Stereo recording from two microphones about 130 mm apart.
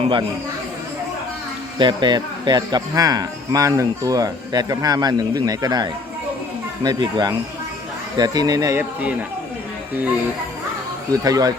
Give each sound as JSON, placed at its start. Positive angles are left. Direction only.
{"t": 1.8, "sound": "speech", "side_deg": -35}
{"t": 8.8, "sound": "speech", "side_deg": -10}
{"t": 11.1, "sound": "speech", "side_deg": -30}